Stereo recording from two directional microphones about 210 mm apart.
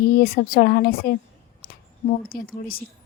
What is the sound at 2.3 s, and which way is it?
Speech, 45° left (ahead or behind).